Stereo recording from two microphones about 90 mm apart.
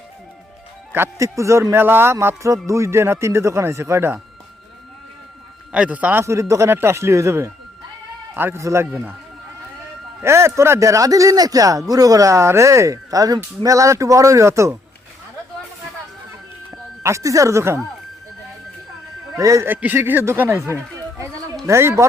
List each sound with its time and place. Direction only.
0.9 s speech: 30° right (ahead or behind)
5.7 s a man's voice: 15° right (ahead or behind)
6.2 s speech: 35° right (ahead or behind)
10.2 s speech: 30° right (ahead or behind)
17.0 s speech: 35° right (ahead or behind)
19.4 s speech: 35° right (ahead or behind)
19.6 s speech: 20° right (ahead or behind)
21.7 s speech: 30° right (ahead or behind)